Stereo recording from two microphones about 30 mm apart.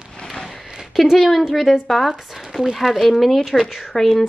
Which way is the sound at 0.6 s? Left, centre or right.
Right.